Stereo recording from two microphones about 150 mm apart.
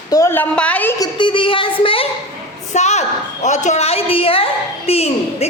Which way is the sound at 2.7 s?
50° left (ahead or behind).